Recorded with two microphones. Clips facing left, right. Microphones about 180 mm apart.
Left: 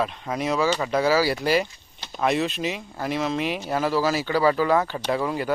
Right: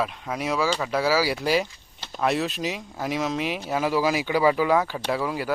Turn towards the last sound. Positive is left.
turn(degrees=-5)  # may be behind; listen again after turning